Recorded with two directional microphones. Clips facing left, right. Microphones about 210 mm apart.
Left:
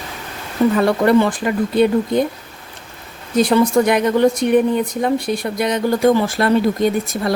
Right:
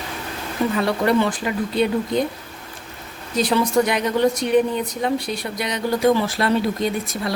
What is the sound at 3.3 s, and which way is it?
Speech, 50° left (ahead or behind).